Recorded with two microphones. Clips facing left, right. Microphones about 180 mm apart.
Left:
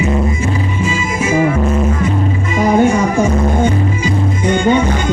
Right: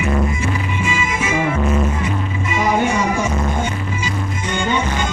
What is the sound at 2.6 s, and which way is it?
Music, 50° left (ahead or behind).